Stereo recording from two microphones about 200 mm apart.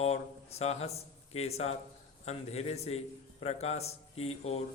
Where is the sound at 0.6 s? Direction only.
30° left (ahead or behind).